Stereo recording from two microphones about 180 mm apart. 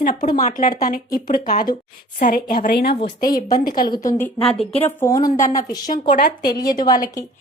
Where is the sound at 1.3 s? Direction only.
50° left (ahead or behind).